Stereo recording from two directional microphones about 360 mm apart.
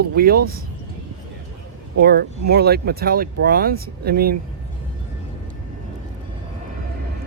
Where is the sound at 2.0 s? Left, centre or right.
Right.